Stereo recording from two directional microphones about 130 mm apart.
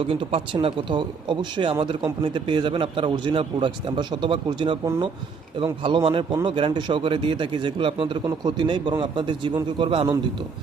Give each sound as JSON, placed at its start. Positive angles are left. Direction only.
{"t": 0.1, "sound": "a man's voice", "side_deg": -45}